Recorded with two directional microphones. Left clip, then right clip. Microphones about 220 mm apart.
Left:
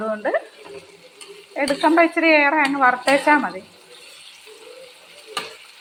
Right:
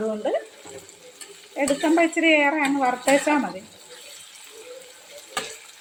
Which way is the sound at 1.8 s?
15° right (ahead or behind).